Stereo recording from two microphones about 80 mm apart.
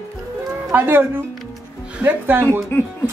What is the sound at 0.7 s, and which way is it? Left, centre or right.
Speech, right.